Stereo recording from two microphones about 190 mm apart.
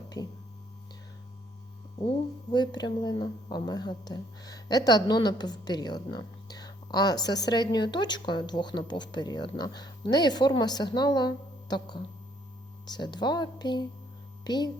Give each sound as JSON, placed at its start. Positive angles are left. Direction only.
{"t": 0.1, "sound": "speech", "side_deg": 20}
{"t": 2.0, "sound": "speech", "side_deg": 20}